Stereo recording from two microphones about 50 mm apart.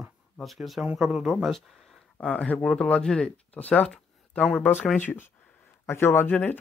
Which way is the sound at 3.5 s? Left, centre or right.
Left.